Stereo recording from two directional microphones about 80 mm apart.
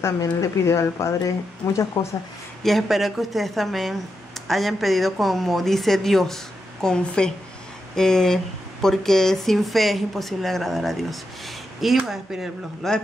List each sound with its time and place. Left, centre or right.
0.0 s speech: left
2.0 s speech: left
2.6 s speech: centre